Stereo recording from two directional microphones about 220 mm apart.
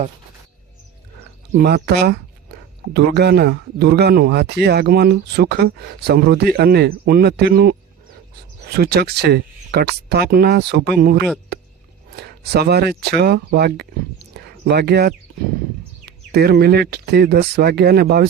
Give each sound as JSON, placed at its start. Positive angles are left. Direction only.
{"t": 1.5, "sound": "a man's voice", "side_deg": -45}